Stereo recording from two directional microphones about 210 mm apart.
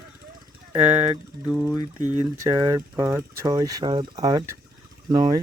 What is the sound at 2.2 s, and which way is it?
Speech, 15° right (ahead or behind).